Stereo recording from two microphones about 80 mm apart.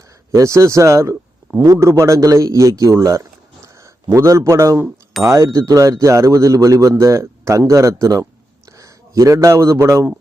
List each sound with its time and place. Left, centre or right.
0.3 s a man's voice: right